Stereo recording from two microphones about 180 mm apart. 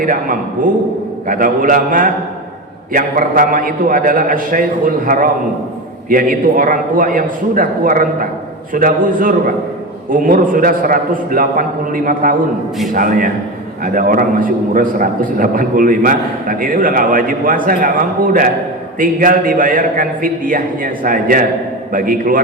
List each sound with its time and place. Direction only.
0.0 s a man's voice: 50° right (ahead or behind)